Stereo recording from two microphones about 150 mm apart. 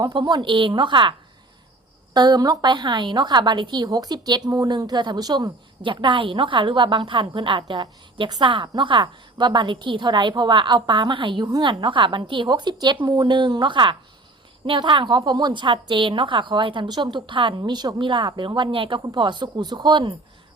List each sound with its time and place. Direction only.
0.0 s a woman's voice: 30° right (ahead or behind)
2.1 s a woman's voice: 30° right (ahead or behind)